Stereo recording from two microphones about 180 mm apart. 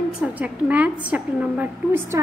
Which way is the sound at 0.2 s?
10° right (ahead or behind).